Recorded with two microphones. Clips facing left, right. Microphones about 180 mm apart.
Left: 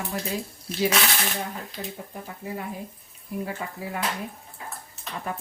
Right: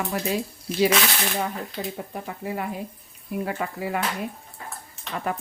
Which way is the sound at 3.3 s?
70° right (ahead or behind).